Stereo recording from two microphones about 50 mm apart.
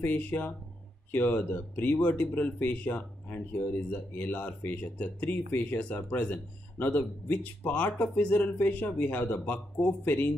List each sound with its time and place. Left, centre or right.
0.0 s speech: left